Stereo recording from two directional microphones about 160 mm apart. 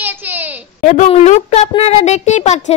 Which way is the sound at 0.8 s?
50° left (ahead or behind).